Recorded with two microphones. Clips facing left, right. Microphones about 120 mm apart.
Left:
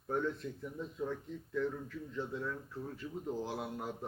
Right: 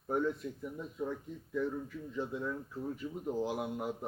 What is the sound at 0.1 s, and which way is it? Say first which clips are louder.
A man's voice: right 2 dB; 10° right (ahead or behind).